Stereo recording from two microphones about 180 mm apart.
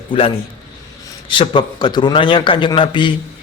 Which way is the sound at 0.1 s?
30° left (ahead or behind).